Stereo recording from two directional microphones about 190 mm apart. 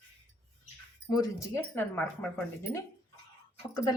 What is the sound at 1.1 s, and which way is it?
Speech, 15° left (ahead or behind).